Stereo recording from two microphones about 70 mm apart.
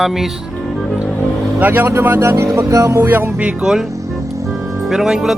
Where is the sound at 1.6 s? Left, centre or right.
Right.